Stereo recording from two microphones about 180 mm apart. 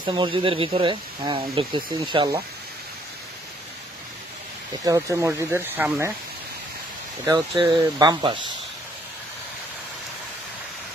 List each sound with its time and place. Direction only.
0.0 s speech: 25° right (ahead or behind)
4.8 s speech: 20° right (ahead or behind)
7.2 s speech: 25° right (ahead or behind)